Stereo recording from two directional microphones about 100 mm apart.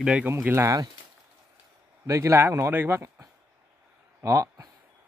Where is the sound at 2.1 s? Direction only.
30° right (ahead or behind).